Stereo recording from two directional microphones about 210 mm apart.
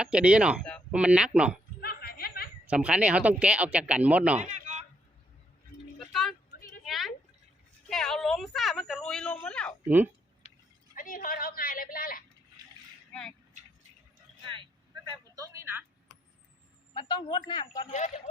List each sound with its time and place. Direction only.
0.0 s speech: 5° right (ahead or behind)
1.8 s snicker: 45° left (ahead or behind)
2.6 s speech: 5° right (ahead or behind)
6.8 s a sound: centre (ahead or behind)
7.9 s a woman's voice: centre (ahead or behind)
9.8 s speech: 10° right (ahead or behind)
10.4 s a sound: 30° left (ahead or behind)
10.9 s a woman's voice: 40° left (ahead or behind)
14.4 s vehicle: 25° right (ahead or behind)
15.4 s a sound: 15° right (ahead or behind)
16.9 s a man's voice: 20° left (ahead or behind)